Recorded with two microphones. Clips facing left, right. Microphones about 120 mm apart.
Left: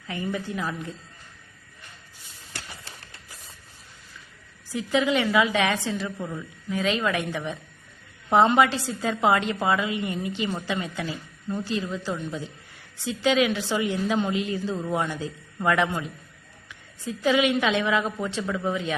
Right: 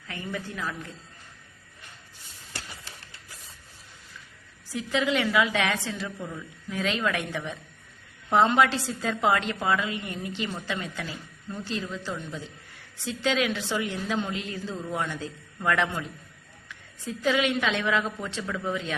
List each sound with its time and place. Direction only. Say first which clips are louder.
0.1 s a woman's voice: left 5 dB; 20° left (ahead or behind)
4.7 s a woman's voice: left 3 dB; 5° left (ahead or behind)
6.7 s a woman's voice: left 3 dB; centre (ahead or behind)